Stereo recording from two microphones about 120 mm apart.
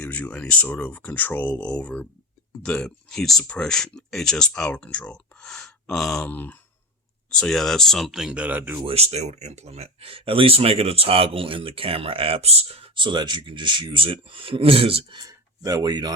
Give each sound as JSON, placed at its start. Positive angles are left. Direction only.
{"t": 0.0, "sound": "speech", "side_deg": 10}
{"t": 8.9, "sound": "speech", "side_deg": -60}
{"t": 15.2, "sound": "speech", "side_deg": -30}